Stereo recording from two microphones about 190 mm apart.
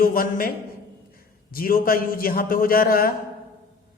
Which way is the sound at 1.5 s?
50° left (ahead or behind).